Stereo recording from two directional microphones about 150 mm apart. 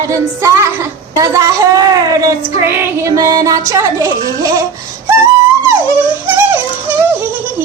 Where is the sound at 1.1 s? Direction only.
20° right (ahead or behind).